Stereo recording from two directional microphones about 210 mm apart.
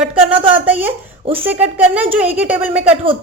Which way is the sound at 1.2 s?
25° right (ahead or behind).